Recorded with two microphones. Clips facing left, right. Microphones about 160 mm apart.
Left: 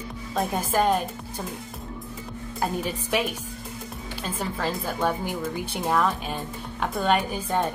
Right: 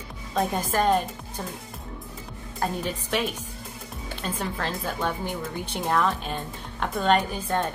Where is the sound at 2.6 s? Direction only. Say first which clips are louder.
Left 1 dB; 10° left (ahead or behind).